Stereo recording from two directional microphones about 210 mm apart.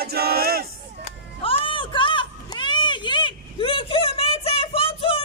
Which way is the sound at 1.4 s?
25° left (ahead or behind).